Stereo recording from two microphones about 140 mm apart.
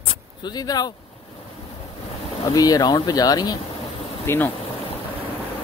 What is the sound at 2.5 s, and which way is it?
Speech, 25° left (ahead or behind).